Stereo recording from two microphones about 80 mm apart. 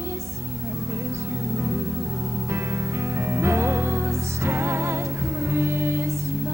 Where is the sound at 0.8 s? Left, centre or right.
Right.